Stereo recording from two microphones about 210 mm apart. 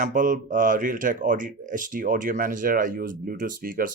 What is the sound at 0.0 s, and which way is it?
Speech, 40° right (ahead or behind).